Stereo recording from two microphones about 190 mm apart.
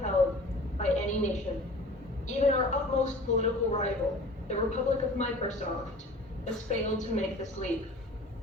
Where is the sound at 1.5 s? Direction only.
25° left (ahead or behind).